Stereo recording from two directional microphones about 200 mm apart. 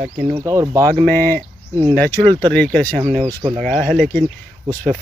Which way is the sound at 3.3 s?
20° right (ahead or behind).